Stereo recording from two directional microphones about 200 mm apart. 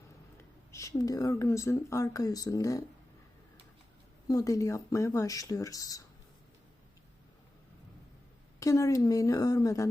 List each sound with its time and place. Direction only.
0.7 s speech: 15° left (ahead or behind)
4.3 s speech: 15° left (ahead or behind)
8.5 s speech: 15° left (ahead or behind)